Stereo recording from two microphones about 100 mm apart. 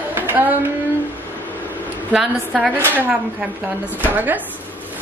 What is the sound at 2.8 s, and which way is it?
A woman's voice, 20° right (ahead or behind).